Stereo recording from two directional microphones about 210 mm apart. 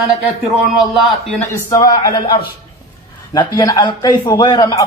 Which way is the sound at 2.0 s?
20° left (ahead or behind).